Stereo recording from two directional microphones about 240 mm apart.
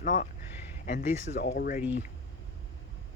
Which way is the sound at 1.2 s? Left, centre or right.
Left.